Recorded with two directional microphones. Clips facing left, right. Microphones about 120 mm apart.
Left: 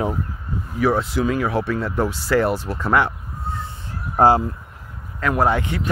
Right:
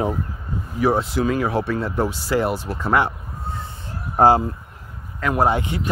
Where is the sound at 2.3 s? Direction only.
15° right (ahead or behind).